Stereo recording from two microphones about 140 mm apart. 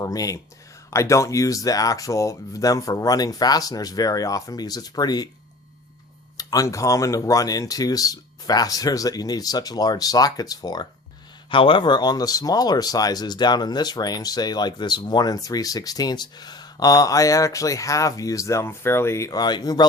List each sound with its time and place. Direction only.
0.0 s speech: 25° left (ahead or behind)
6.3 s speech: 25° left (ahead or behind)